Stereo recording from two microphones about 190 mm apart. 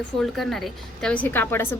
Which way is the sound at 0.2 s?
Centre (ahead or behind).